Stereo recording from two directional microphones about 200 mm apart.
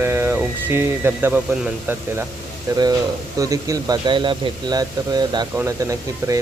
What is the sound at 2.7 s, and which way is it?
Speech, 15° right (ahead or behind).